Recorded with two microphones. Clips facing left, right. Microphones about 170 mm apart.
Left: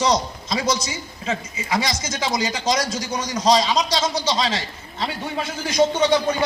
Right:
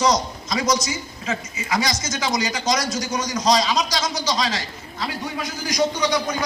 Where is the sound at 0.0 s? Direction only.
30° left (ahead or behind).